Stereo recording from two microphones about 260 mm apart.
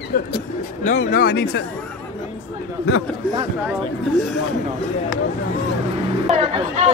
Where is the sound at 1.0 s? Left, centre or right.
Left.